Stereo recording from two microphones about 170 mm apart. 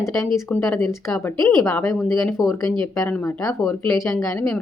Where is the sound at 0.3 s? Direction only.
15° left (ahead or behind).